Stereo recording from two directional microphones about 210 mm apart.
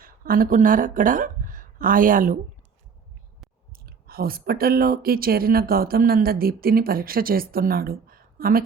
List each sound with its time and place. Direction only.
0.0 s speech: 40° right (ahead or behind)
3.7 s speech: 45° right (ahead or behind)